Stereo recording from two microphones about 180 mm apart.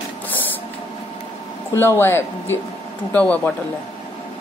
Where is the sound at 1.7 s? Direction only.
15° left (ahead or behind).